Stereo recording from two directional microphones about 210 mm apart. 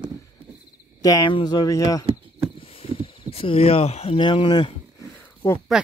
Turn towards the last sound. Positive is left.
turn(degrees=10)  # may be behind; listen again after turning